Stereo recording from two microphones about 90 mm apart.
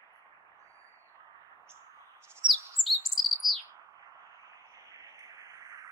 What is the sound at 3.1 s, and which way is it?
Bird, centre (ahead or behind).